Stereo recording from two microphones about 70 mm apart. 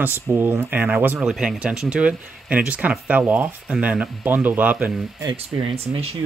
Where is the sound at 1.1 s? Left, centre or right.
Centre; by 4.9 s right.